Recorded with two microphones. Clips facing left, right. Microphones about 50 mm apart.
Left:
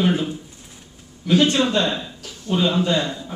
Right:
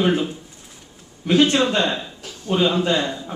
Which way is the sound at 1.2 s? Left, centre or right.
Right.